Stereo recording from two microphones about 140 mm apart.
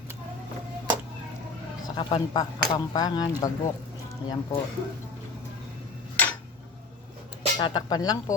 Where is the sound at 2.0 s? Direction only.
35° left (ahead or behind).